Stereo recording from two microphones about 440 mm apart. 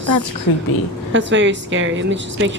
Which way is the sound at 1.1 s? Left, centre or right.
Right.